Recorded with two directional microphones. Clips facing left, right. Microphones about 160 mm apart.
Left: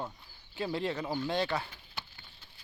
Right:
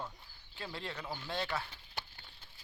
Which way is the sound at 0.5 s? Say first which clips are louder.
Left 10 dB; 5° left (ahead or behind).